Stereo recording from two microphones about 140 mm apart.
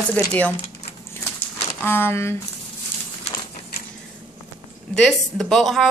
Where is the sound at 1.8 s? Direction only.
15° left (ahead or behind).